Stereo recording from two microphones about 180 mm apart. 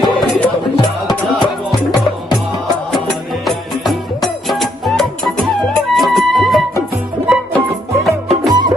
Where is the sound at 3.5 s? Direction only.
Centre (ahead or behind).